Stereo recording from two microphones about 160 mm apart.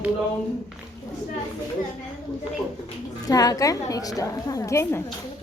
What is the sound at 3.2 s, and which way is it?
A woman's voice, 25° left (ahead or behind).